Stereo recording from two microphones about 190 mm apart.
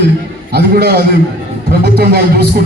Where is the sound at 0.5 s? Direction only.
55° right (ahead or behind).